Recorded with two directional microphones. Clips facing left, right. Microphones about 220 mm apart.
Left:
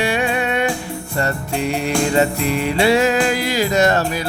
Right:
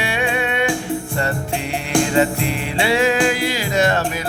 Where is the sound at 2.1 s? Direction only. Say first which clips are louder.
Left 1 dB; 40° left (ahead or behind).